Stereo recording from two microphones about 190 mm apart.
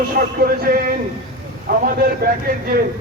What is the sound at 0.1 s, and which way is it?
Speech, 50° right (ahead or behind).